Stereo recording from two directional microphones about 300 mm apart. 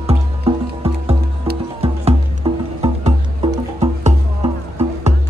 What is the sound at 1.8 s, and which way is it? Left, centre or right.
Music, centre.